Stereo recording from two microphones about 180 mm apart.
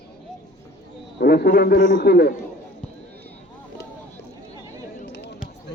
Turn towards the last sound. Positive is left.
turn(degrees=70)  # may be behind; listen again after turning